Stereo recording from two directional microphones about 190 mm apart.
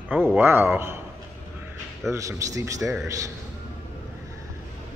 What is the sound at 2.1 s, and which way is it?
Speech, 15° right (ahead or behind).